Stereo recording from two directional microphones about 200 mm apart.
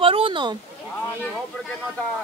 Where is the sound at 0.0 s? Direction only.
25° right (ahead or behind).